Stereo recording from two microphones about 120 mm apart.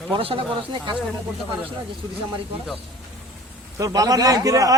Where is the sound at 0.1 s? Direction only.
50° right (ahead or behind).